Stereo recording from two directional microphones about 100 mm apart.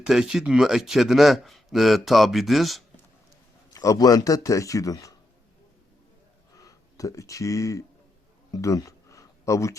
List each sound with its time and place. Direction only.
0.0 s speech: 5° right (ahead or behind)
3.7 s speech: 35° left (ahead or behind)
6.6 s speech: 35° left (ahead or behind)
8.5 s a sound: 35° left (ahead or behind)